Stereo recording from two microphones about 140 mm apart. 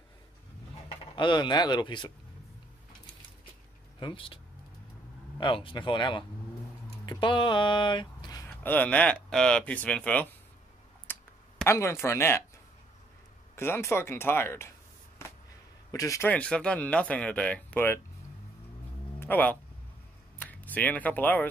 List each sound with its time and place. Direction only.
0.8 s speech: 35° left (ahead or behind)
4.0 s speech: 35° left (ahead or behind)
5.4 s speech: 35° left (ahead or behind)
8.5 s speech: 10° left (ahead or behind)
11.1 s clicking: 15° left (ahead or behind)
11.6 s speech: 20° left (ahead or behind)
13.6 s speech: 20° left (ahead or behind)
15.9 s speech: 20° left (ahead or behind)
16.3 s speech: 10° left (ahead or behind)
19.1 s speech: 15° left (ahead or behind)